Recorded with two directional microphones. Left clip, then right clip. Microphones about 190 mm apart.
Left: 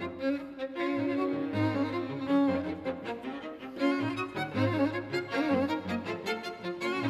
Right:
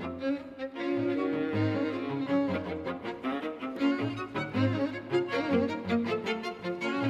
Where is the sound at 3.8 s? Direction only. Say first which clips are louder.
Left 2 dB; 35° left (ahead or behind).